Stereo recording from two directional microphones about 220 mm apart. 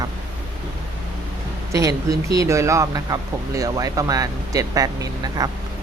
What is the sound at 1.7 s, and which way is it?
Speech, 15° right (ahead or behind).